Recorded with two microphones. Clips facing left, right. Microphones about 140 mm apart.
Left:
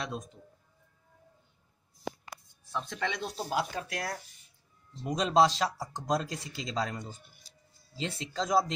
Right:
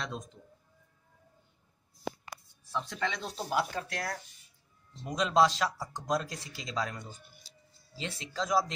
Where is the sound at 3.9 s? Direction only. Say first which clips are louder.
Left 1 dB; 20° left (ahead or behind).